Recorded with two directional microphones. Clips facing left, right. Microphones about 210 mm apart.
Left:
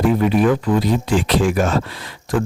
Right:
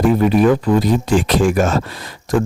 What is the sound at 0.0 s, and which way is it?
Speech, 40° right (ahead or behind).